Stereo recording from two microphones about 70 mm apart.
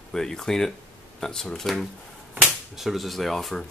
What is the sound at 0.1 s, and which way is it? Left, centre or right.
Speech, centre.